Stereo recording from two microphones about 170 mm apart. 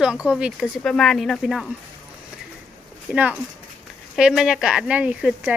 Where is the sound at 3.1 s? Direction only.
10° right (ahead or behind).